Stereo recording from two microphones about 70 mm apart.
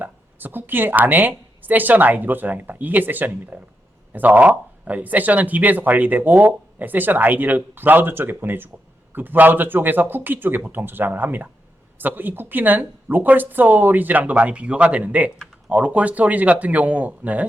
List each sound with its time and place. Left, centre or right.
0.0 s a woman's voice: right